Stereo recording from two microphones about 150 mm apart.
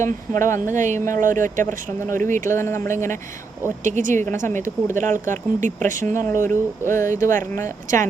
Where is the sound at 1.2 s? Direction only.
60° right (ahead or behind).